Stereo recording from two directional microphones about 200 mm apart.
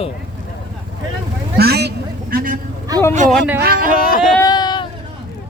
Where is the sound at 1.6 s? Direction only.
55° right (ahead or behind).